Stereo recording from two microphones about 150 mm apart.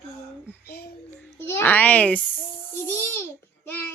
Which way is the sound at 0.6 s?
90° left.